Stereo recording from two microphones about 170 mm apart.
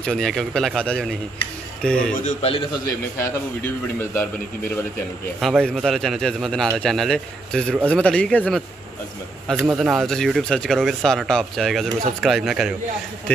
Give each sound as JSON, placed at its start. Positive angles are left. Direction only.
{"t": 0.0, "sound": "speech", "side_deg": 5}
{"t": 2.2, "sound": "a man's voice", "side_deg": 35}
{"t": 4.0, "sound": "a man's voice", "side_deg": 15}
{"t": 5.4, "sound": "a man's voice", "side_deg": 0}
{"t": 9.8, "sound": "speech", "side_deg": 0}